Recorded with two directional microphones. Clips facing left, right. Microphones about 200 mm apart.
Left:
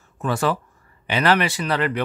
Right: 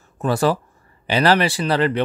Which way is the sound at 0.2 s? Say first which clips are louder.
Right 4 dB; 35° right (ahead or behind).